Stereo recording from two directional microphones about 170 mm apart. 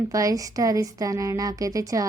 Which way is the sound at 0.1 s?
20° right (ahead or behind).